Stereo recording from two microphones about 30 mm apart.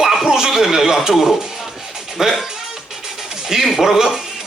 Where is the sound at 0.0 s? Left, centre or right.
Centre.